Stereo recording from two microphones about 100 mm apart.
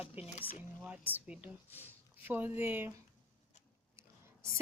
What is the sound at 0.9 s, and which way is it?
A woman's voice, 15° right (ahead or behind).